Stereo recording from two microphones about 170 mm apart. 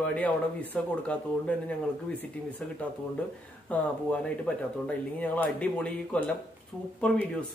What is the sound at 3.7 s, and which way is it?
Speech, 10° left (ahead or behind).